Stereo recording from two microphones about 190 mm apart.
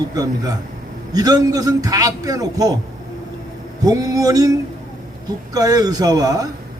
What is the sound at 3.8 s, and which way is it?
A man's voice, 20° right (ahead or behind).